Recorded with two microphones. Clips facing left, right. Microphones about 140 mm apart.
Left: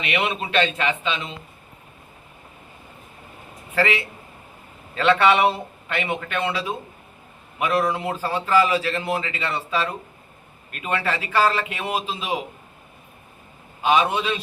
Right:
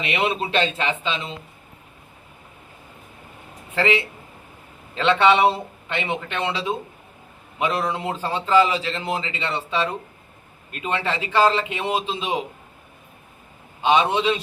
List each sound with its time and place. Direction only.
0.0 s a man's voice: 30° right (ahead or behind)
3.8 s a man's voice: 25° right (ahead or behind)
7.9 s a man's voice: 25° right (ahead or behind)
13.8 s a man's voice: 25° right (ahead or behind)